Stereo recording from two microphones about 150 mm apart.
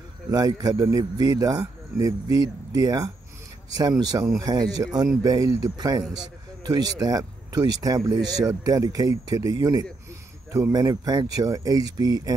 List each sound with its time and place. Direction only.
0.3 s speech: 25° right (ahead or behind)